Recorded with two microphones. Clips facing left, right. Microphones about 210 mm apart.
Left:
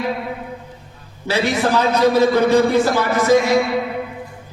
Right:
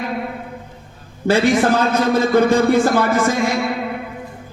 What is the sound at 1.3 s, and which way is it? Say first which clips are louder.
A man's voice: right 4 dB; 50° right (ahead or behind).